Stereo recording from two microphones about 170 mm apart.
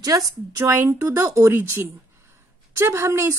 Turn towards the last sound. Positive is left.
turn(degrees=-15)  # may be behind; listen again after turning